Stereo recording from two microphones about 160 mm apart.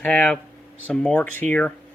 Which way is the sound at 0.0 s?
10° left (ahead or behind).